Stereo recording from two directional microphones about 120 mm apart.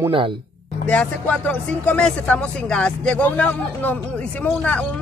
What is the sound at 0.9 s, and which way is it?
Speech, 10° left (ahead or behind).